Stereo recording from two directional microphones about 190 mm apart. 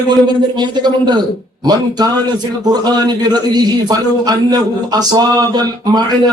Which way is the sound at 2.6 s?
20° right (ahead or behind).